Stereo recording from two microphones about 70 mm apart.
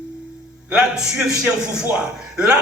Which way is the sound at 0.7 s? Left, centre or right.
Centre.